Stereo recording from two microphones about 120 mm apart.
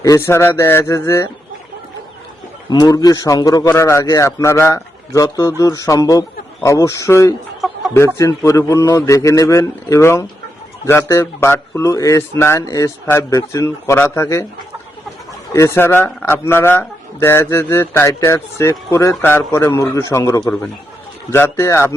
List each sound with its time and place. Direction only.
0.0 s a man's voice: 25° left (ahead or behind)
2.6 s a man's voice: 30° left (ahead or behind)
7.6 s chicken: centre (ahead or behind)
7.9 s a man's voice: 25° left (ahead or behind)
15.5 s a man's voice: 25° left (ahead or behind)